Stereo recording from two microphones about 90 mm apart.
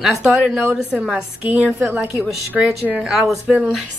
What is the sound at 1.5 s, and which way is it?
Speech, 20° right (ahead or behind).